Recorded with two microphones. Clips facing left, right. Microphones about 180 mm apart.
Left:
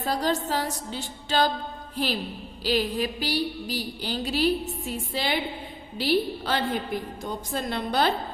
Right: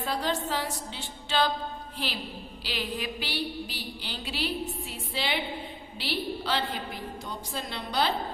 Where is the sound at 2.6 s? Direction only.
40° left (ahead or behind).